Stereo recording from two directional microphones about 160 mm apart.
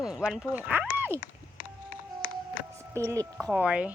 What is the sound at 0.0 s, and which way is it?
A child's voice, 5° right (ahead or behind).